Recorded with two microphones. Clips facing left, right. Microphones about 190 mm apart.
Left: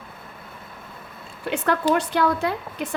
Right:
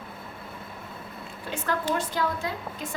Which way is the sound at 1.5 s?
70° left (ahead or behind).